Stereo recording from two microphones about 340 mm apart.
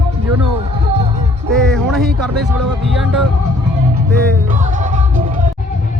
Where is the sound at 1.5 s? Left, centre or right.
Centre.